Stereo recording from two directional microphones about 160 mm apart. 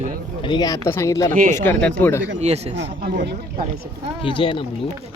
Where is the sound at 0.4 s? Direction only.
25° left (ahead or behind).